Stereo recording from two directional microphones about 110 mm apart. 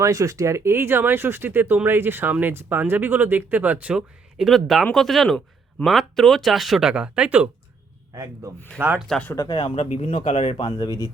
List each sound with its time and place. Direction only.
0.0 s speech: 30° right (ahead or behind); by 7.5 s 15° right (ahead or behind)
8.1 s speech: 30° right (ahead or behind)
8.8 s speech: 15° right (ahead or behind)
9.4 s speech: 40° left (ahead or behind)
9.7 s speech: 75° left (ahead or behind)
10.6 s speech: 40° left (ahead or behind)